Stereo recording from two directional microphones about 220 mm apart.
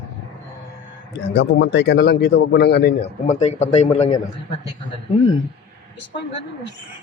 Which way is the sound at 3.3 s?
30° left (ahead or behind).